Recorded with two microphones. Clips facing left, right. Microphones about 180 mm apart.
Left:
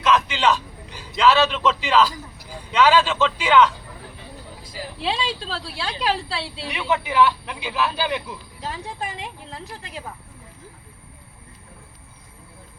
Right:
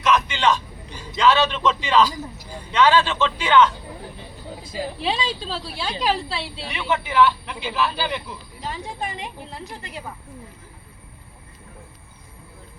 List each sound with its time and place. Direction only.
0.0 s a man's voice: 5° left (ahead or behind)
4.9 s a woman's voice: centre (ahead or behind)